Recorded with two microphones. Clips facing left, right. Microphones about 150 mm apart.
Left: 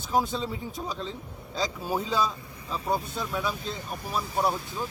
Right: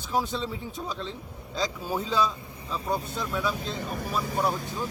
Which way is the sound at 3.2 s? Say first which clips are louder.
Right 1 dB; 5° left (ahead or behind).